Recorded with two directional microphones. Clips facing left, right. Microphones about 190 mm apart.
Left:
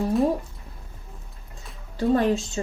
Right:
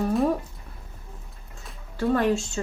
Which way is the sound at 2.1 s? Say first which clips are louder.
Left 2 dB; 30° left (ahead or behind).